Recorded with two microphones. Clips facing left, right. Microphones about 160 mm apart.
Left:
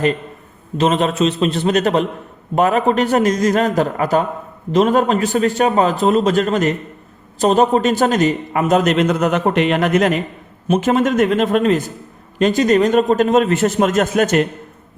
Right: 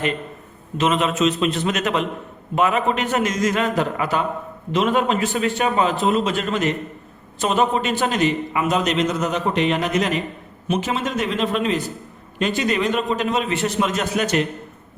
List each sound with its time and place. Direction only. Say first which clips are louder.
0.8 s a man's voice: left 4 dB; 35° left (ahead or behind)